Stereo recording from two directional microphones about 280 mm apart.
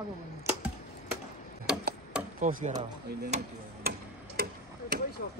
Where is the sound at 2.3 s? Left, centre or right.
Right.